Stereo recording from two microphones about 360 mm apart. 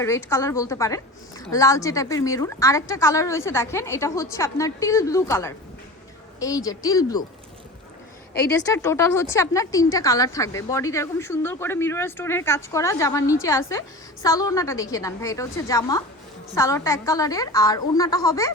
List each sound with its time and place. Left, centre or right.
0.0 s a woman's voice: centre
8.3 s a woman's voice: left
8.6 s a woman's voice: centre